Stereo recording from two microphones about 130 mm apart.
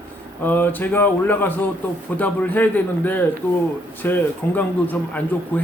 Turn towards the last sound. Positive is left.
turn(degrees=15)  # may be behind; listen again after turning